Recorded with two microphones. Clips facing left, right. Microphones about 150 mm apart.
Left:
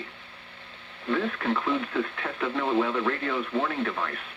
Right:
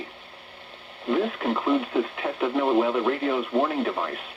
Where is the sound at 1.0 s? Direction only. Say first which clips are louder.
Right 3 dB; 20° right (ahead or behind).